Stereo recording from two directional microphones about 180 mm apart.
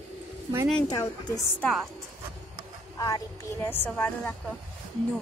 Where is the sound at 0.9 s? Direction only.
20° left (ahead or behind).